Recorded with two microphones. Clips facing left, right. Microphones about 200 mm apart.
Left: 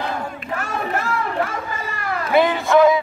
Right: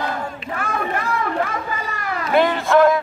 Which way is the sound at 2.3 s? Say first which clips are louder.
Even; centre (ahead or behind).